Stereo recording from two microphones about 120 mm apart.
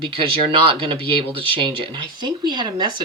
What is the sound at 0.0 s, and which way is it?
Speech, 45° right (ahead or behind).